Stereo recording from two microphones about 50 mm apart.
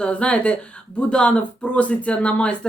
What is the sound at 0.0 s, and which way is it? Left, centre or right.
Speech, left.